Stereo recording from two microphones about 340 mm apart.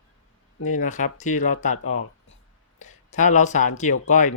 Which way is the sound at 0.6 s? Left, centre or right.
Left.